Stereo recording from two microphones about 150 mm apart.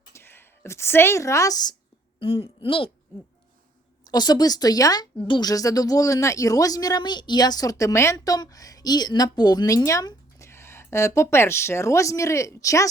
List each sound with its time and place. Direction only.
0.1 s speech: 15° left (ahead or behind)
2.1 s speech: 35° left (ahead or behind)
4.1 s speech: 25° left (ahead or behind)